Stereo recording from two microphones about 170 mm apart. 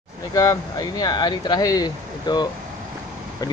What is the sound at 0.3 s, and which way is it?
Speech, 20° left (ahead or behind).